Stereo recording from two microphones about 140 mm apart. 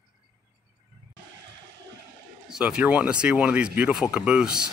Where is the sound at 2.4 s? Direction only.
5° right (ahead or behind).